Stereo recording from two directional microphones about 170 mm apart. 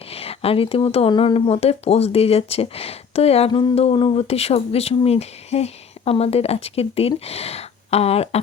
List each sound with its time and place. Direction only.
0.1 s speech: 35° left (ahead or behind)